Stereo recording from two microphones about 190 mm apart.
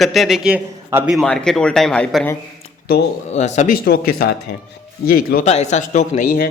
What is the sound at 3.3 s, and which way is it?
Speech, 35° left (ahead or behind).